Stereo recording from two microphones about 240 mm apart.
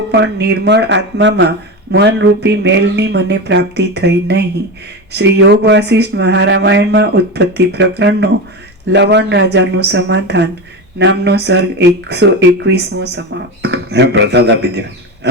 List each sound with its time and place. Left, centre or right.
0.1 s speech: right